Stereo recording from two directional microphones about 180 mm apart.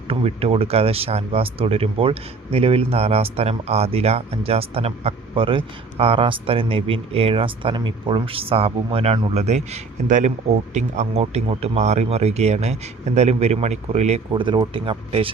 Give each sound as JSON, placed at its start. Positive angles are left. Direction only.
{"t": 0.1, "sound": "speech", "side_deg": -35}